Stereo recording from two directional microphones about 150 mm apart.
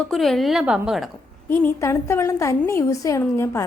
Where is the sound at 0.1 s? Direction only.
Centre (ahead or behind).